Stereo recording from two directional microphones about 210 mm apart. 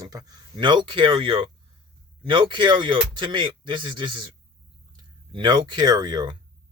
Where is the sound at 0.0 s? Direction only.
20° right (ahead or behind).